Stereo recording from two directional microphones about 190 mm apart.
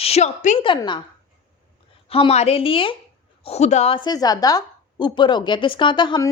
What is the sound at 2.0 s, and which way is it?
A woman's voice, 30° left (ahead or behind).